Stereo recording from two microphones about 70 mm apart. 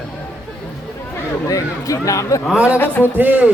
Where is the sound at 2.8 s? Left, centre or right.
Left.